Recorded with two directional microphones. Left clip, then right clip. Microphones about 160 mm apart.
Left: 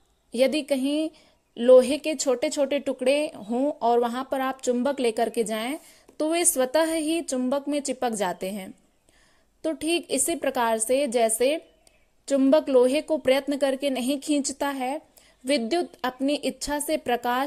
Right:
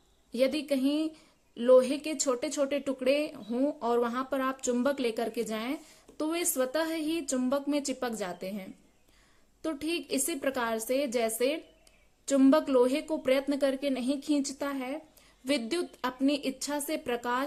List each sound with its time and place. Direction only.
0.3 s a woman's voice: 35° left (ahead or behind)
15.4 s a woman's voice: 25° left (ahead or behind)